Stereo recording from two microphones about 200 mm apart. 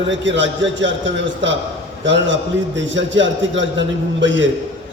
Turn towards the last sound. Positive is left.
turn(degrees=-65)  # may be behind; listen again after turning